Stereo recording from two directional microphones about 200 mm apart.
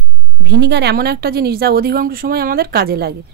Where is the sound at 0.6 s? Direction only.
55° right (ahead or behind).